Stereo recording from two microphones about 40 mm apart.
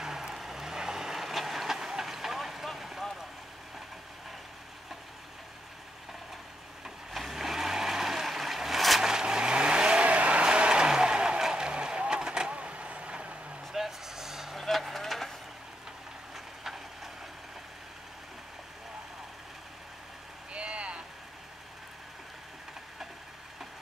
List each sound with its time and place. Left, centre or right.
0.0 s vehicle: centre
7.1 s a sound: centre
9.0 s vehicle: centre
10.0 s vehicle: right
13.7 s vehicle: centre
14.6 s vehicle: centre
16.6 s rail transport: centre
20.5 s vehicle: right